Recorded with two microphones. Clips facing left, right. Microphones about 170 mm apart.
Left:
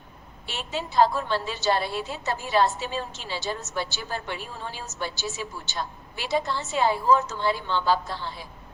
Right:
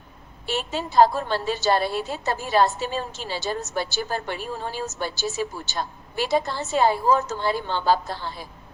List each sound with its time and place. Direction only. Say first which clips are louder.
0.4 s a woman's voice: right 5 dB; 40° right (ahead or behind)